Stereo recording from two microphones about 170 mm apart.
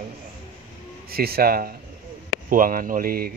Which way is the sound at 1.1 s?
65° right (ahead or behind).